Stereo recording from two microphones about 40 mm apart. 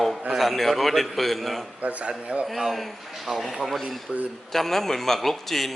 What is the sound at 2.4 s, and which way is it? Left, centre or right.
Speech, centre.